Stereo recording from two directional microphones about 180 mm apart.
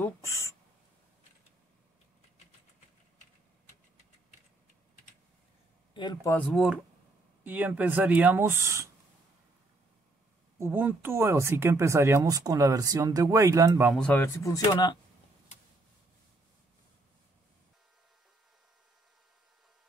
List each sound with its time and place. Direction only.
0.0 s a sound: 15° left (ahead or behind)
5.9 s speech: 25° left (ahead or behind)
6.3 s speech: 5° left (ahead or behind); by 8.9 s 15° right (ahead or behind)
10.6 s speech: 10° right (ahead or behind)
13.9 s speech: 10° left (ahead or behind); by 15.0 s 25° left (ahead or behind)